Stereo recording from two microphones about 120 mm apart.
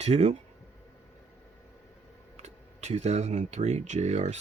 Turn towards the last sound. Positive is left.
turn(degrees=-70)  # may be behind; listen again after turning